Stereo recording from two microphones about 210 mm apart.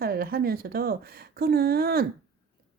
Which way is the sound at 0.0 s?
45° right (ahead or behind).